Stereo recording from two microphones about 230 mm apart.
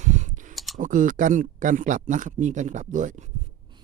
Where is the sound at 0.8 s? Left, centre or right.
Right.